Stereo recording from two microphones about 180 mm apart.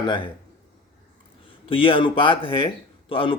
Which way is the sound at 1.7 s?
30° left (ahead or behind).